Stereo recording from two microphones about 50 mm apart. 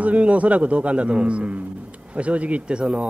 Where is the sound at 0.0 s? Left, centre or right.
Right.